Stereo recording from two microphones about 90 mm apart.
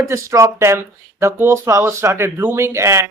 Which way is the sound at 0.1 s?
35° right (ahead or behind).